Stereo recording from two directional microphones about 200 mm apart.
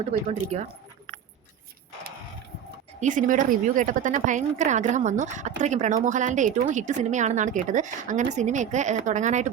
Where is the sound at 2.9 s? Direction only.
40° right (ahead or behind).